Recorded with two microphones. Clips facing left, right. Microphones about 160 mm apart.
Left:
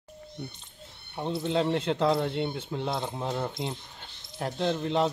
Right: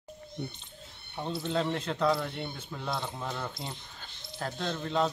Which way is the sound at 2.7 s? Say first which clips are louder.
Left 4 dB; 25° left (ahead or behind).